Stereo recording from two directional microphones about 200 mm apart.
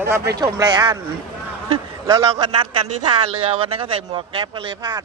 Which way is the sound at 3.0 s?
25° right (ahead or behind).